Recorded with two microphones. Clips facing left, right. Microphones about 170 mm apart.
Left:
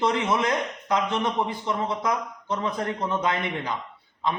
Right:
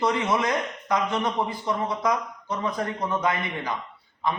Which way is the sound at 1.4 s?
25° left (ahead or behind).